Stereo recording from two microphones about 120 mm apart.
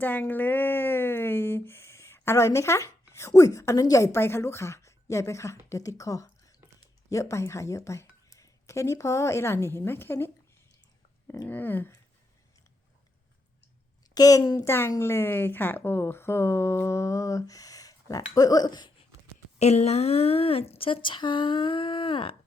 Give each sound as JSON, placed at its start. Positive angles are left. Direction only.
{"t": 0.0, "sound": "a woman's voice", "side_deg": 15}
{"t": 11.4, "sound": "a sound", "side_deg": 15}
{"t": 14.1, "sound": "a woman's voice", "side_deg": 30}
{"t": 19.5, "sound": "speech", "side_deg": 65}